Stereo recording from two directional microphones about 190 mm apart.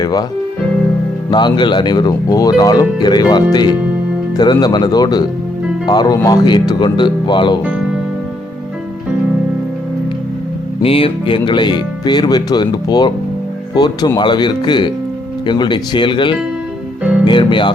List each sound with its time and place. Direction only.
0.0 s speech: 20° left (ahead or behind)
1.3 s speech: 25° left (ahead or behind)
10.8 s speech: 30° left (ahead or behind)